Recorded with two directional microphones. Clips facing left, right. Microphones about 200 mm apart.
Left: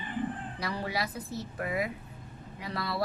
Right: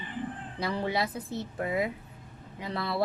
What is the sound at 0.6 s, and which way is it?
A woman's voice, 25° right (ahead or behind).